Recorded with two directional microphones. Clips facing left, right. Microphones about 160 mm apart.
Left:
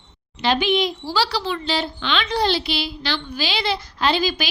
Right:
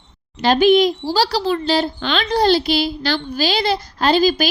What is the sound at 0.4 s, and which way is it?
A woman's voice, 45° right (ahead or behind).